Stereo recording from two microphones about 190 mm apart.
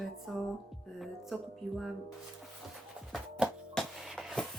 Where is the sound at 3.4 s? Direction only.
5° left (ahead or behind).